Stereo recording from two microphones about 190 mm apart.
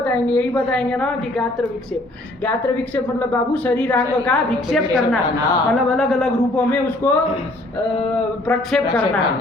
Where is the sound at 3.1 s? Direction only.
10° left (ahead or behind).